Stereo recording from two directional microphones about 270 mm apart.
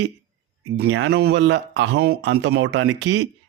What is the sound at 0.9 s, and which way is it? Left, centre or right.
Speech, right.